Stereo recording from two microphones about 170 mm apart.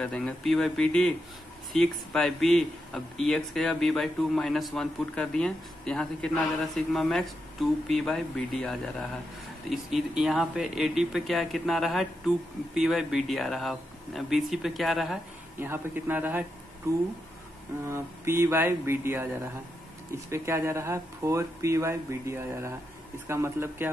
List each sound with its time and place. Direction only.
0.0 s speech: 5° left (ahead or behind)
15.6 s speech: 10° right (ahead or behind)
20.2 s speech: 15° right (ahead or behind)